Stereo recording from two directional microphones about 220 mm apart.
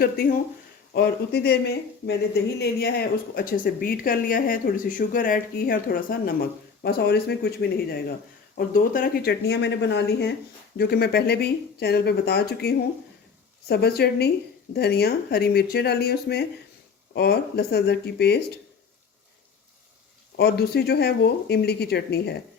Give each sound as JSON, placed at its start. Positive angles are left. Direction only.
{"t": 0.0, "sound": "speech", "side_deg": 40}
{"t": 20.3, "sound": "speech", "side_deg": 45}